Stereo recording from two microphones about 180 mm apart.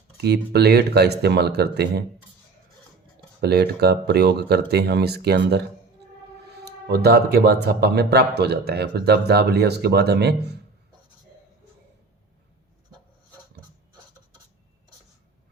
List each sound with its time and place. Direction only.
0.2 s speech: 65° right (ahead or behind)
3.4 s speech: 65° right (ahead or behind)
6.7 s speech: 65° right (ahead or behind)